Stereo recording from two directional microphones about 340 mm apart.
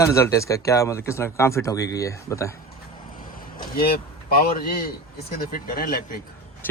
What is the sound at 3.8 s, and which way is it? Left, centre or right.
Speech, left.